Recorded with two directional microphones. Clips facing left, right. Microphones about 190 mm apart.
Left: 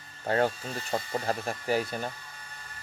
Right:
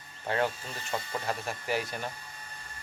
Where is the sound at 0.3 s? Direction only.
40° left (ahead or behind).